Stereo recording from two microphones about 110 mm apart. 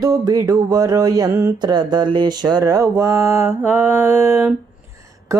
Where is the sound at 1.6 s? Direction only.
40° right (ahead or behind).